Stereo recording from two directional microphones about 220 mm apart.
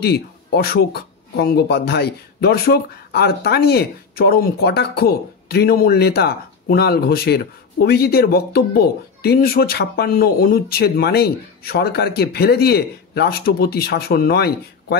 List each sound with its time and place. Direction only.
0.0 s speech: 45° left (ahead or behind)